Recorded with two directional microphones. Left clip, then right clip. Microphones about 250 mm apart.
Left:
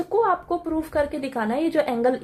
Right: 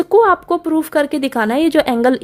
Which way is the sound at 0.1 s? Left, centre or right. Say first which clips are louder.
Right 9 dB; right.